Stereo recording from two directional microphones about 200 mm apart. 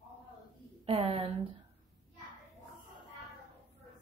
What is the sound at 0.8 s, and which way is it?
Speech, 30° right (ahead or behind).